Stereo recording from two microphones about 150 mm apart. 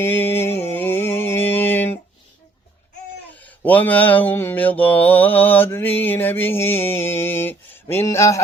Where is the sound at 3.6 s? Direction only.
10° left (ahead or behind).